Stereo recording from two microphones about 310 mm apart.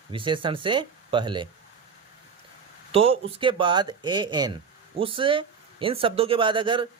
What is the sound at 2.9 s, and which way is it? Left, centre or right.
Speech, centre.